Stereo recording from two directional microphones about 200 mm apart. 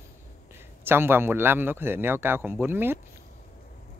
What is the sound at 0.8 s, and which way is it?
A man's voice, 10° right (ahead or behind).